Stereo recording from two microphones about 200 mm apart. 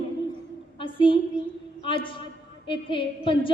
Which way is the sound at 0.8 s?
25° left (ahead or behind).